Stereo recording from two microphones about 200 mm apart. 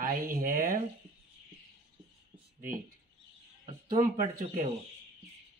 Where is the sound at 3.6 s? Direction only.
30° right (ahead or behind).